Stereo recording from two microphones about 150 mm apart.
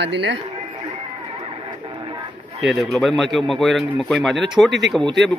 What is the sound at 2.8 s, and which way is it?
A man's voice, centre (ahead or behind).